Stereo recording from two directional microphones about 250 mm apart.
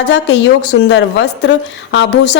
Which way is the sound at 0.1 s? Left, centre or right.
Left.